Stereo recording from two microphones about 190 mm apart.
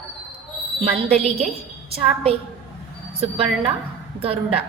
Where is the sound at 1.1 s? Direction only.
35° right (ahead or behind).